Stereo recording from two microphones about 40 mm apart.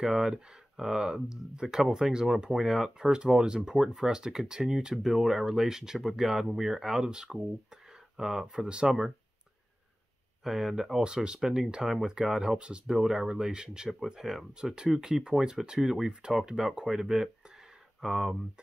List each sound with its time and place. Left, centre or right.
0.0 s speech: centre
8.5 s speech: right
10.4 s speech: centre
11.0 s speech: centre
16.1 s speech: right; by 18.4 s centre